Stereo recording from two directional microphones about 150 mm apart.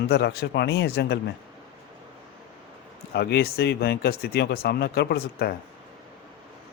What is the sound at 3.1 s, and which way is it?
Speech, 90° left.